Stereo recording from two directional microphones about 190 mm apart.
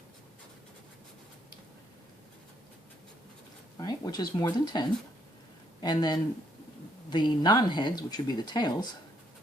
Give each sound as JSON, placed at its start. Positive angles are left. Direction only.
{"t": 3.8, "sound": "speech", "side_deg": 20}